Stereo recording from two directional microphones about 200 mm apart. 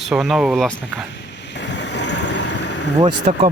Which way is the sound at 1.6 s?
60° left (ahead or behind).